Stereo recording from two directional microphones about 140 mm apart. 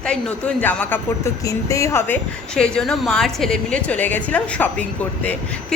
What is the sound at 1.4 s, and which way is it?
Speech, 25° left (ahead or behind).